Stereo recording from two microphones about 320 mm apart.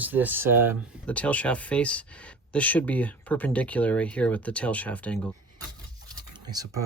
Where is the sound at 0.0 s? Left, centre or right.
Centre.